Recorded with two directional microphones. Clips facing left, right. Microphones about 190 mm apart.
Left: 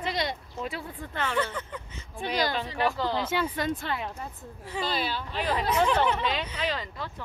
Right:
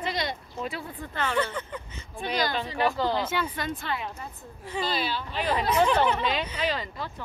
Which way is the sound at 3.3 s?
30° left (ahead or behind).